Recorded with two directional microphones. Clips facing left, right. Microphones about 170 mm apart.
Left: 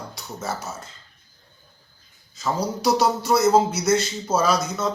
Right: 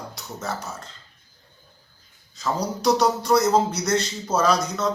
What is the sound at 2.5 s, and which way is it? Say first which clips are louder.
A man's voice: even; 5° left (ahead or behind).